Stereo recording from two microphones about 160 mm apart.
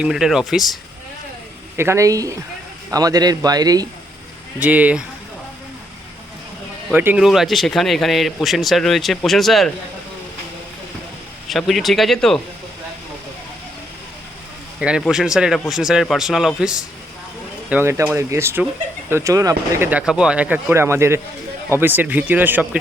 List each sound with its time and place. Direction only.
0.0 s speech: 5° right (ahead or behind)
1.7 s speech: 15° right (ahead or behind)
4.6 s speech: 10° right (ahead or behind)
6.9 s speech: 10° right (ahead or behind)
11.4 s speech: centre (ahead or behind)
14.8 s speech: 5° right (ahead or behind)